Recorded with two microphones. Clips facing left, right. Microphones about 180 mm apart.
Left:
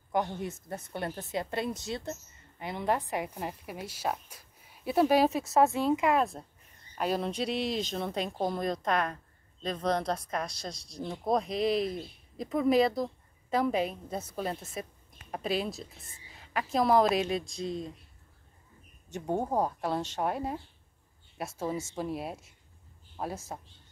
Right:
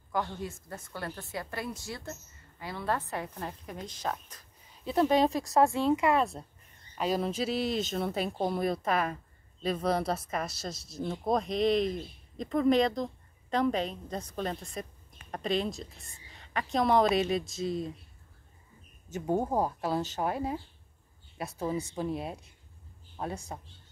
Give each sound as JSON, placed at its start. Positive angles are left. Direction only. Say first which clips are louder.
{"t": 0.1, "sound": "a woman's voice", "louder": "left 2 dB", "side_deg": 20}
{"t": 19.0, "sound": "speech", "louder": "right 2 dB", "side_deg": -5}